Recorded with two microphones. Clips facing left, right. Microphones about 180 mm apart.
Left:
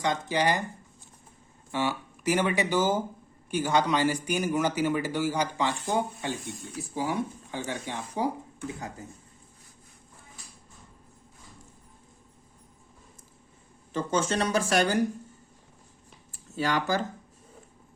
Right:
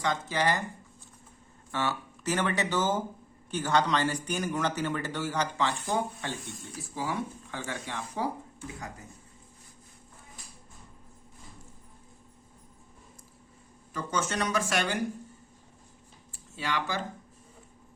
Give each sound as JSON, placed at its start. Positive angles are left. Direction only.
{"t": 0.0, "sound": "speech", "side_deg": 20}
{"t": 1.7, "sound": "speech", "side_deg": 15}
{"t": 13.9, "sound": "speech", "side_deg": 30}
{"t": 16.3, "sound": "speech", "side_deg": 40}